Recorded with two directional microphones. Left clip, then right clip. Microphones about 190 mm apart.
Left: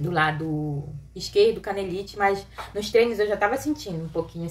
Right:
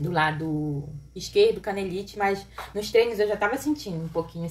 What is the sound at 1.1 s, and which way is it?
A woman's voice, 10° left (ahead or behind).